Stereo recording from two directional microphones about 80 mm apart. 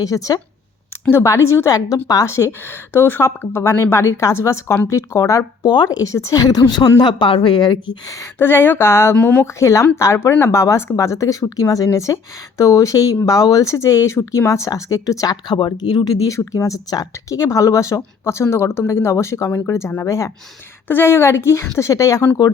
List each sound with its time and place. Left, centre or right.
0.0 s speech: left
1.1 s speech: left
5.6 s a woman's voice: left
6.0 s a woman's voice: left
8.2 s speech: left
9.1 s speech: left
9.6 s speech: left
15.5 s a woman's voice: left
16.2 s speech: left
20.8 s speech: left